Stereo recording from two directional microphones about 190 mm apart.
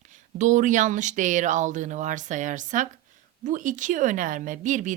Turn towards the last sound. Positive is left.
turn(degrees=-40)  # may be behind; listen again after turning